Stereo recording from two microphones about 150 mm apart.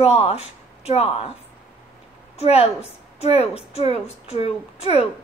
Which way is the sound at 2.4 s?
40° left (ahead or behind).